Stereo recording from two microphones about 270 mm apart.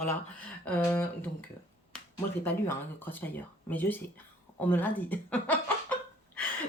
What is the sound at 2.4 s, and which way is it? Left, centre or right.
A woman's voice, centre.